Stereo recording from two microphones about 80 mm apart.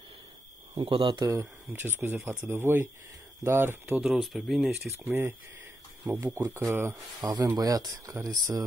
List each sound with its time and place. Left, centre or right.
0.7 s speech: right
1.2 s speech: right
4.0 s speech: centre
5.0 s speech: right
7.2 s speech: right